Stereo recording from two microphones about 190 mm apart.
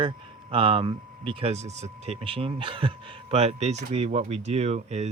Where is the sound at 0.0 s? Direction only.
25° right (ahead or behind).